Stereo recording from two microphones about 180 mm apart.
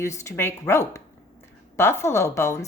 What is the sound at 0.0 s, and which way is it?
A woman's voice, 15° left (ahead or behind).